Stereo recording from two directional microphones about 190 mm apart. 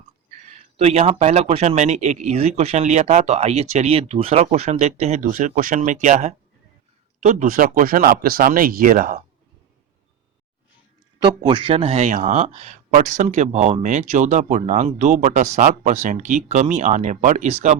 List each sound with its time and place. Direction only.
0.4 s speech: 35° right (ahead or behind)
11.2 s speech: 25° right (ahead or behind)